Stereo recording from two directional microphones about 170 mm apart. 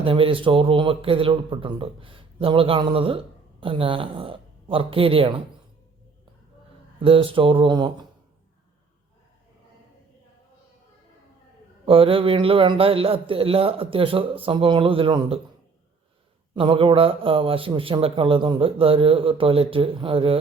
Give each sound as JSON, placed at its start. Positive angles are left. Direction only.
{"t": 0.0, "sound": "a man's voice", "side_deg": -30}
{"t": 7.0, "sound": "a man's voice", "side_deg": -30}
{"t": 11.9, "sound": "a man's voice", "side_deg": -30}
{"t": 16.6, "sound": "a man's voice", "side_deg": -30}